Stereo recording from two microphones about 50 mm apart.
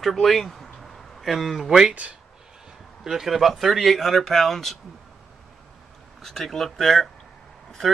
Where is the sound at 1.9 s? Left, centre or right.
Right.